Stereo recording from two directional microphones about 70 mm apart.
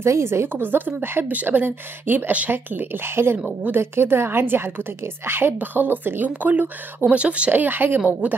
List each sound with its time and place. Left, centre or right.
0.0 s a woman's voice: right